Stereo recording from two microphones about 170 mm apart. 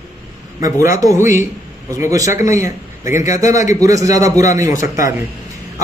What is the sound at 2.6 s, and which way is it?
Speech, 15° right (ahead or behind).